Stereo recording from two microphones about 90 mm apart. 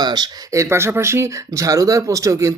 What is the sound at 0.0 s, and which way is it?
Speech, 50° right (ahead or behind).